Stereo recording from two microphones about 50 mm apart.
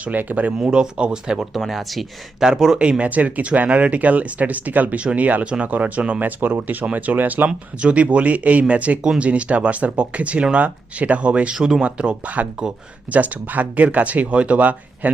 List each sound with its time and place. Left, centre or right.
0.0 s speech: right
0.5 s speech: centre
1.5 s speech: centre
3.0 s speech: right
11.5 s speech: centre; by 15.1 s right